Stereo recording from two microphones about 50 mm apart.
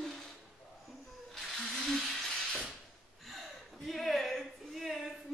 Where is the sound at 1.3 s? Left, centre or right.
Centre.